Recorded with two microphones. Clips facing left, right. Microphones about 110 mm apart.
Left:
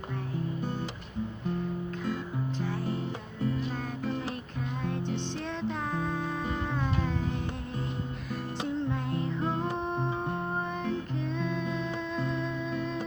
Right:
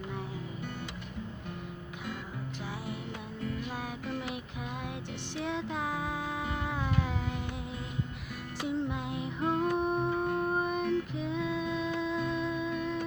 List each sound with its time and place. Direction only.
2.6 s music: 10° right (ahead or behind)
5.4 s music: 10° right (ahead or behind)
8.6 s music: 15° right (ahead or behind)
10.1 s music: 25° left (ahead or behind)
10.4 s music: 15° right (ahead or behind)